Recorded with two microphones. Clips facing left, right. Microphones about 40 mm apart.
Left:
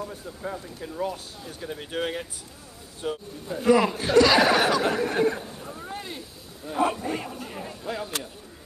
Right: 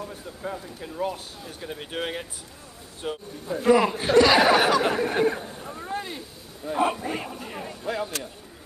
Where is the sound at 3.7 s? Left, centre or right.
Centre.